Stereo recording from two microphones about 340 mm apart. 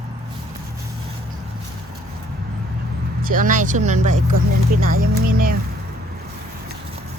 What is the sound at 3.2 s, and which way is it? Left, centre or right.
Speech, right.